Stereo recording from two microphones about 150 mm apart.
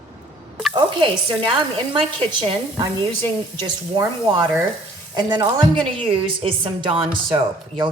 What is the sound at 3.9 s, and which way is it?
Speech, 30° right (ahead or behind).